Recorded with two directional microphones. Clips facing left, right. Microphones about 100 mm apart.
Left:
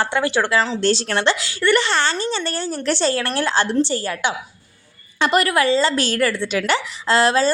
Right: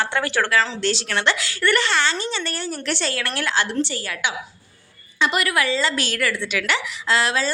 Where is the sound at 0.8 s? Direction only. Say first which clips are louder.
Left 5 dB; 40° left (ahead or behind).